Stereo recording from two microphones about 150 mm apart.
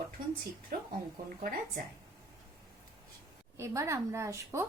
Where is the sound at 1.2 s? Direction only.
70° right (ahead or behind).